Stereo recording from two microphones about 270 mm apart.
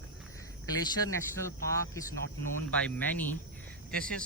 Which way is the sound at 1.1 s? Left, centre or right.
Centre.